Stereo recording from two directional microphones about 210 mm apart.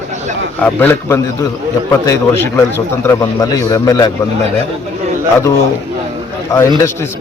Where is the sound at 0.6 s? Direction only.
5° left (ahead or behind).